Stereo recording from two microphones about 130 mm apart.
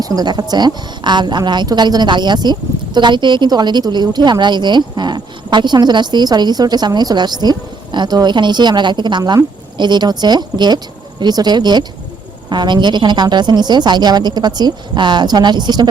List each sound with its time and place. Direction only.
0.0 s a woman's voice: 30° right (ahead or behind)